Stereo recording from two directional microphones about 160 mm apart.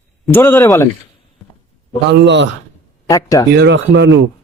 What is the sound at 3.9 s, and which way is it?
Speech, 90° right.